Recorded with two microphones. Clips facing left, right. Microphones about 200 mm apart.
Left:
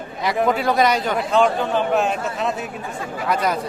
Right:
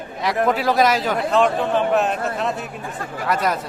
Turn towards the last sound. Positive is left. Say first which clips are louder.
# even
turn(degrees=0)  # may be behind; listen again after turning